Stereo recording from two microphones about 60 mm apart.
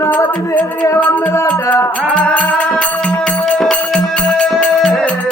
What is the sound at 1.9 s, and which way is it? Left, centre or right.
Music, left.